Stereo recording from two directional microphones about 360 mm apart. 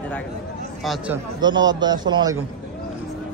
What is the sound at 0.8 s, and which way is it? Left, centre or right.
A man's voice, centre.